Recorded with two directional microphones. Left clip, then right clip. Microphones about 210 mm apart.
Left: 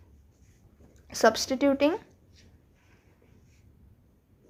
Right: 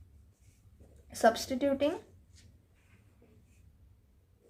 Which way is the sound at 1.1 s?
40° left (ahead or behind).